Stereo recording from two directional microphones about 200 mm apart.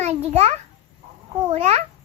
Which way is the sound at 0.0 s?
35° right (ahead or behind).